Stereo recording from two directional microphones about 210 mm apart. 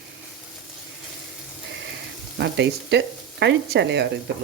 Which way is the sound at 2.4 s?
55° right (ahead or behind).